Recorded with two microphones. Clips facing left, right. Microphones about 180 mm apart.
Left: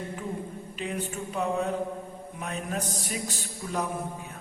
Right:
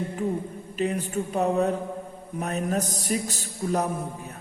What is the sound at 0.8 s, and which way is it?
A man's voice, 40° right (ahead or behind).